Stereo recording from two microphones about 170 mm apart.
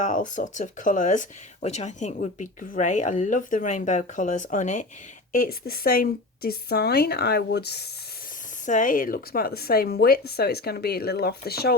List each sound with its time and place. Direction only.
0.0 s speech: 50° left (ahead or behind)
5.3 s a woman's voice: 60° left (ahead or behind)
8.6 s a woman's voice: 50° left (ahead or behind); by 11.7 s 65° left (ahead or behind)